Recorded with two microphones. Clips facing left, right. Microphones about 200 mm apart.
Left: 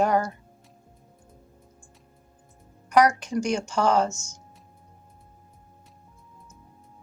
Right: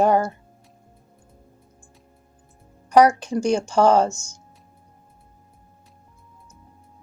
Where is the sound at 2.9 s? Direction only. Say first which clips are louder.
Right 5 dB; 30° right (ahead or behind).